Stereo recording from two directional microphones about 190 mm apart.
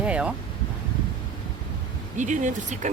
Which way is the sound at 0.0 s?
5° right (ahead or behind).